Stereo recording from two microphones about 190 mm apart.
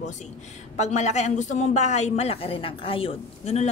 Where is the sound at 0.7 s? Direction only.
35° left (ahead or behind).